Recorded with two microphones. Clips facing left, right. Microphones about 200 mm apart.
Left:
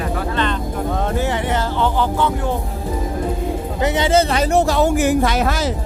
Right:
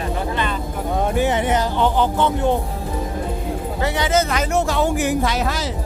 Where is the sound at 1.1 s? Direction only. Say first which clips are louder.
Right 2 dB; 20° right (ahead or behind).